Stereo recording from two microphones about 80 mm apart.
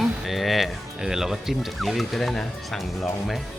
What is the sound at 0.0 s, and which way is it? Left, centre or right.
Speech, centre.